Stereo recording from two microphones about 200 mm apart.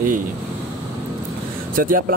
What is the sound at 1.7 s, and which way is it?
Speech, 45° right (ahead or behind).